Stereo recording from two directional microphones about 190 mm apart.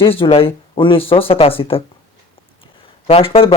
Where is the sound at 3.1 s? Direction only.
30° left (ahead or behind).